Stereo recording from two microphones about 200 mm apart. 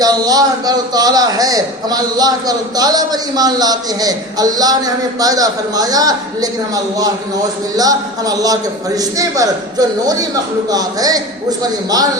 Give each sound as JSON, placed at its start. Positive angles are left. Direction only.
{"t": 0.0, "sound": "a man's voice", "side_deg": -20}